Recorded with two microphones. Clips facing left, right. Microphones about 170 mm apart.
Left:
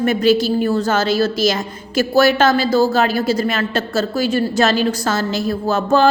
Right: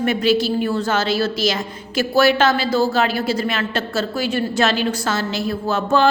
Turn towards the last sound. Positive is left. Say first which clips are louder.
# left 2 dB
turn(degrees=40)  # may be behind; listen again after turning